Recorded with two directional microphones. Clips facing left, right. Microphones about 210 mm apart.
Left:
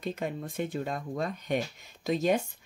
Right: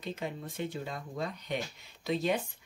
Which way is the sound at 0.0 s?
50° left (ahead or behind).